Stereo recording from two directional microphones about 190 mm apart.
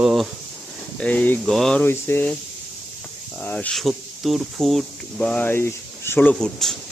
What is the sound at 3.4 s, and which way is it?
Speech, 5° left (ahead or behind).